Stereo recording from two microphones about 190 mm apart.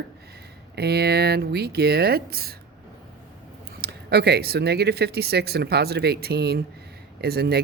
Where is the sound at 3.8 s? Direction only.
55° right (ahead or behind).